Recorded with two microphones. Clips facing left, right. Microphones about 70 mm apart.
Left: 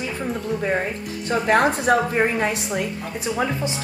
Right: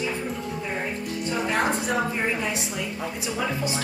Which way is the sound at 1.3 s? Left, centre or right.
Left.